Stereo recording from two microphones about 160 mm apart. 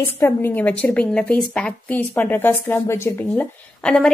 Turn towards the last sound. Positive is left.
turn(degrees=5)  # may be behind; listen again after turning